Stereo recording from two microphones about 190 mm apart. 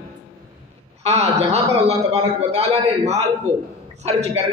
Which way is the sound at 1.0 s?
35° right (ahead or behind).